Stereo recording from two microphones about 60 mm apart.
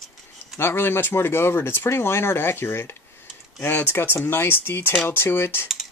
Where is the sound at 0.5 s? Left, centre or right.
Left.